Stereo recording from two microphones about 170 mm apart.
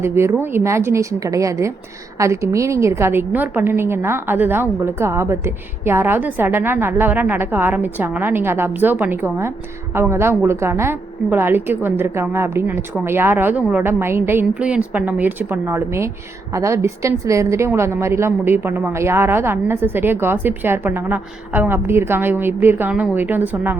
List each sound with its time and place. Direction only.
0.0 s a woman's voice: 15° right (ahead or behind)